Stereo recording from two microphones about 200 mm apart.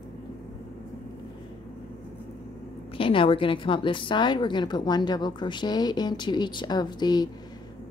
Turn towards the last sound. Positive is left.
turn(degrees=20)  # may be behind; listen again after turning